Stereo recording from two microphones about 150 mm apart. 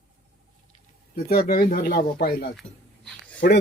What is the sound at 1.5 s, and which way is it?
Speech, 80° left.